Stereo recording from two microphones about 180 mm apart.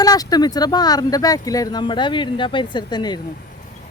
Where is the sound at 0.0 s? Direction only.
20° left (ahead or behind).